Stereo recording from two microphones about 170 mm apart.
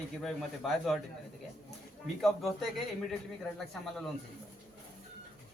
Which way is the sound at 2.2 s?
Centre (ahead or behind).